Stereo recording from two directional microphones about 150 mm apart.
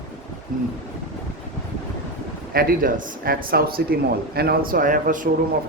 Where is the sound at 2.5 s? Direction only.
80° right; by 5.3 s 60° right (ahead or behind).